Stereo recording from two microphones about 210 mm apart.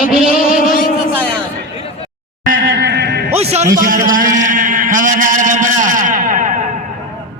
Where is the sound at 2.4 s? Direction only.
45° right (ahead or behind).